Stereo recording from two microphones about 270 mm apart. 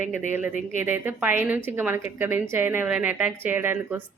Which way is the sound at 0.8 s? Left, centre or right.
Centre.